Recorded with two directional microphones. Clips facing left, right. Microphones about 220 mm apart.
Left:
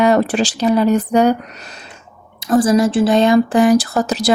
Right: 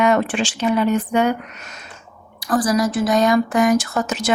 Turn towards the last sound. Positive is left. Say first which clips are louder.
# left 4 dB
turn(degrees=35)  # may be behind; listen again after turning